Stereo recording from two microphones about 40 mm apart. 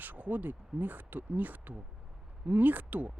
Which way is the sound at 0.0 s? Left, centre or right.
Right.